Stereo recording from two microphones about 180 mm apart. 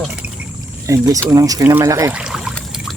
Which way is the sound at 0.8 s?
15° right (ahead or behind).